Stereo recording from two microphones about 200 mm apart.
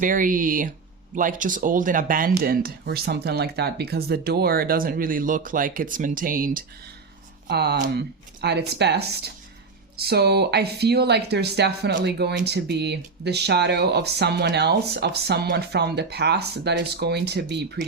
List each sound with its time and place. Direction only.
0.0 s speech: 40° right (ahead or behind)
7.4 s speech: 55° right (ahead or behind)